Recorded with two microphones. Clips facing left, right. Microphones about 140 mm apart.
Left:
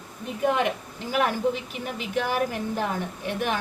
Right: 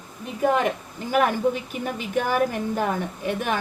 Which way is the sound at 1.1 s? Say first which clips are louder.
Right 3 dB; 45° right (ahead or behind).